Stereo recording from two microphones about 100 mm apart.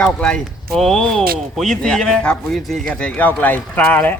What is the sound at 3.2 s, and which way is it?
Speech, 15° left (ahead or behind).